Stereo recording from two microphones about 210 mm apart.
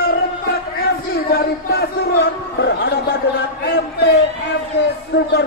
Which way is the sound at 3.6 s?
55° left (ahead or behind).